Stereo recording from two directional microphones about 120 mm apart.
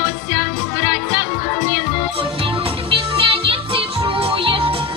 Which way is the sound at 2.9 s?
50° right (ahead or behind).